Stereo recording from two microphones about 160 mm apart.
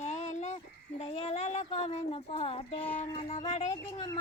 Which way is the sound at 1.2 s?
45° left (ahead or behind).